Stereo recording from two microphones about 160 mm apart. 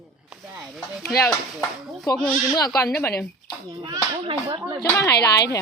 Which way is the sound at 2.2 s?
Centre (ahead or behind).